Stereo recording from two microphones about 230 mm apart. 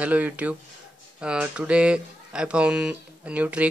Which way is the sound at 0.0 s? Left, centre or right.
Centre.